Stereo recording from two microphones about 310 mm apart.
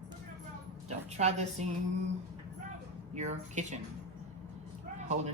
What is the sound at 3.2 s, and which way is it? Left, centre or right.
Speech, right.